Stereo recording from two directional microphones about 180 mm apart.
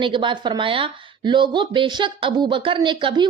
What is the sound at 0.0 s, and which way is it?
Speech, 25° right (ahead or behind).